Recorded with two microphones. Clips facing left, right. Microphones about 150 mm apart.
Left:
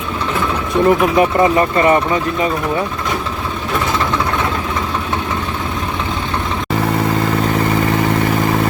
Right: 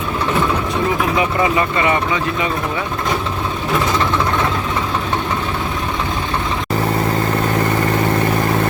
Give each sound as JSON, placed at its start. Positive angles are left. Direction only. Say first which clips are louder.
{"t": 0.9, "sound": "speech", "louder": "left 7 dB", "side_deg": 45}